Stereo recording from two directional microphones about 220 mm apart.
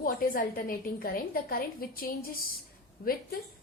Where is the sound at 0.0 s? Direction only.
40° left (ahead or behind).